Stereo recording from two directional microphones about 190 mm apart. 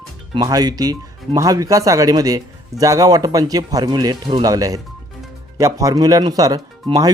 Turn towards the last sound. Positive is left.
turn(degrees=-20)  # may be behind; listen again after turning